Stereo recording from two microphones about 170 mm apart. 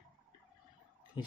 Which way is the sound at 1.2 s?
25° left (ahead or behind).